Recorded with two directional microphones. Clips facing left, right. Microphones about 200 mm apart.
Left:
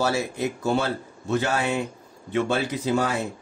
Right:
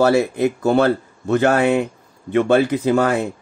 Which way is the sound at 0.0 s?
60° right (ahead or behind).